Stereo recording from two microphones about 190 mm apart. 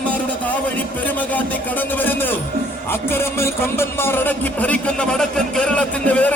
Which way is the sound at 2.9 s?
15° left (ahead or behind).